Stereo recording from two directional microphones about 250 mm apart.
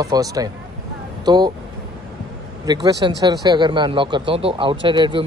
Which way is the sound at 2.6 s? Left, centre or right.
Centre.